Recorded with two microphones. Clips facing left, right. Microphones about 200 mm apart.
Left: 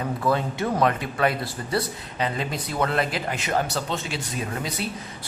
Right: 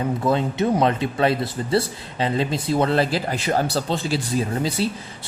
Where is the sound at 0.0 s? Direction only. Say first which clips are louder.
Right 3 dB; 25° right (ahead or behind).